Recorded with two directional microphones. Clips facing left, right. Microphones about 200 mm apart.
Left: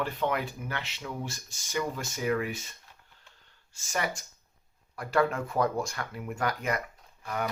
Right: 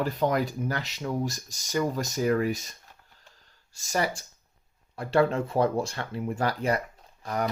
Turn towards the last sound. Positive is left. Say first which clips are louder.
# right 4 dB
turn(degrees=-40)  # may be behind; listen again after turning